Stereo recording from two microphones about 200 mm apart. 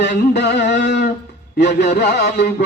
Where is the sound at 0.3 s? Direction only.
60° left (ahead or behind).